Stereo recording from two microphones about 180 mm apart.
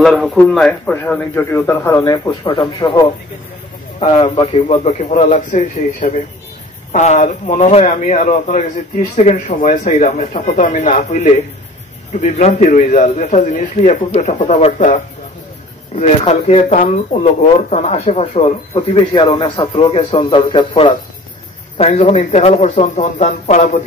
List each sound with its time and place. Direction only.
0.0 s speech: centre (ahead or behind); by 3.1 s 20° left (ahead or behind)
4.2 s a man's voice: 25° left (ahead or behind)
16.0 s a man's voice: 40° left (ahead or behind)
18.8 s a man's voice: 25° left (ahead or behind)